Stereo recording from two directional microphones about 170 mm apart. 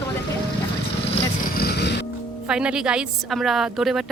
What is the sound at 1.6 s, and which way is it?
Music, 75° left (ahead or behind).